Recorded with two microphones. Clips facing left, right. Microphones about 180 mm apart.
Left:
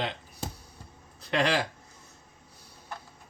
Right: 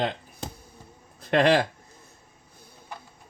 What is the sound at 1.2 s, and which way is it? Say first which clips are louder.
Speech: right 6 dB; 50° right (ahead or behind).